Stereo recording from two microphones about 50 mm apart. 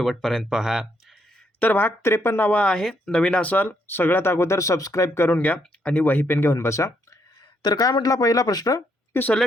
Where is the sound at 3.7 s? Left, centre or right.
Left.